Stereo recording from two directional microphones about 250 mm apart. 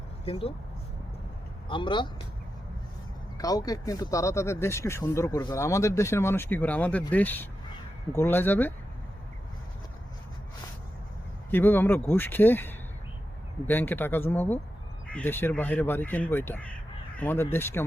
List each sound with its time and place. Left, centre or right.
0.3 s speech: left
1.6 s speech: centre
3.3 s speech: centre
11.5 s speech: centre